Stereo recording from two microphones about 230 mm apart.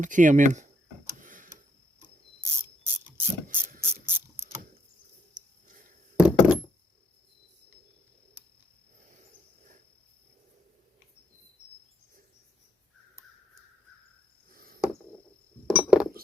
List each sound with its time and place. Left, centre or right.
0.0 s speech: right
1.2 s tick-tock: right
3.2 s ratchet: centre
6.1 s a sound: centre
14.5 s a sound: right
15.6 s chink: centre